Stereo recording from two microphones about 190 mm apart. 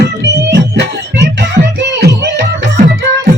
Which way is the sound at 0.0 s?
65° right (ahead or behind).